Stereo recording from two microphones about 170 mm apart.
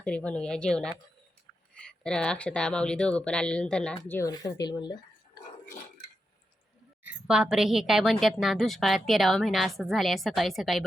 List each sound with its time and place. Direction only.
0.0 s a woman's voice: 10° left (ahead or behind)
2.0 s a woman's voice: 5° left (ahead or behind)
4.3 s speech: 20° left (ahead or behind)
7.0 s a woman's voice: 5° right (ahead or behind)